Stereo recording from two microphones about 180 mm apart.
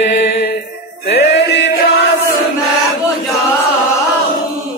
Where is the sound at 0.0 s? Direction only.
70° left (ahead or behind).